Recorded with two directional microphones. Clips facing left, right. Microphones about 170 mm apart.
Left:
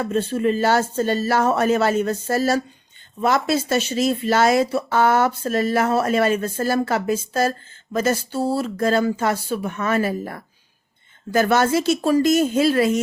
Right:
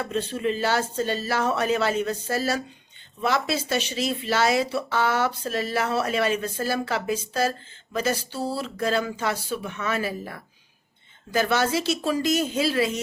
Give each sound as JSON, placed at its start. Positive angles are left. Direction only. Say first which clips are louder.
{"t": 0.0, "sound": "speech", "louder": "left 6 dB", "side_deg": 45}